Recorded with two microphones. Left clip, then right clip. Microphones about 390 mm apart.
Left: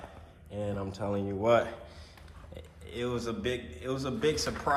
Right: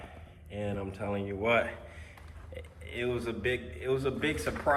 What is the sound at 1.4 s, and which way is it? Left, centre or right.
Speech, centre.